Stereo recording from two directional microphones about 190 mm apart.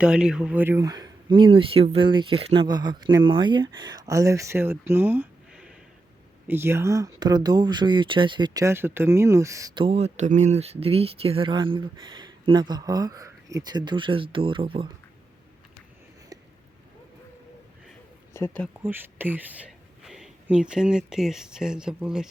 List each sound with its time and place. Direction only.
0.0 s speech: 5° right (ahead or behind); by 14.8 s 30° right (ahead or behind)
18.3 s speech: 10° left (ahead or behind)
18.8 s speech: 10° right (ahead or behind)